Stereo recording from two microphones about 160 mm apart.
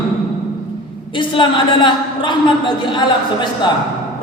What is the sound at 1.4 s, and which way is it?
Speech, 30° left (ahead or behind).